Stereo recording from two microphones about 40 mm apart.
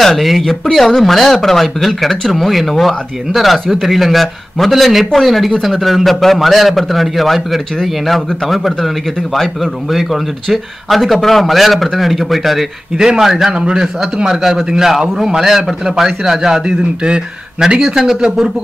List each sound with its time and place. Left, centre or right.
0.0 s speech: centre
12.9 s a man's voice: centre
13.2 s speech: centre
13.5 s a man's voice: right